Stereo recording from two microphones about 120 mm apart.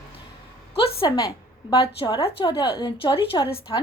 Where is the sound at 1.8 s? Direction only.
40° left (ahead or behind).